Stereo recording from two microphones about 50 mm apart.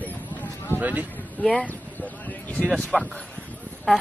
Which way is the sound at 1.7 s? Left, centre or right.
Left.